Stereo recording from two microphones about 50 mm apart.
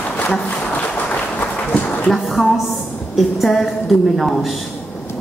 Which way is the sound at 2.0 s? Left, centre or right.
Centre.